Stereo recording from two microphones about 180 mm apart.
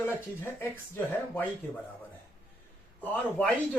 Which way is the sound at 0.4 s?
10° left (ahead or behind).